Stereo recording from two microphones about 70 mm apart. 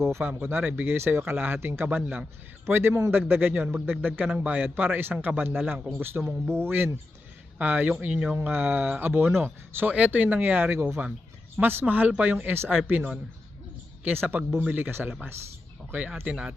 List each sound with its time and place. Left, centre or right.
0.0 s a man's voice: right
10.8 s a man's voice: right
11.5 s speech: right